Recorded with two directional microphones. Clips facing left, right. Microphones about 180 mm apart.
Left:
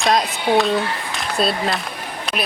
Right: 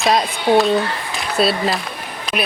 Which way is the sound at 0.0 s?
Centre (ahead or behind).